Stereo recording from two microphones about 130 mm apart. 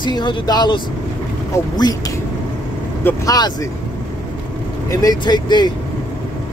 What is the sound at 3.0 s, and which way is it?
Speech, 15° left (ahead or behind).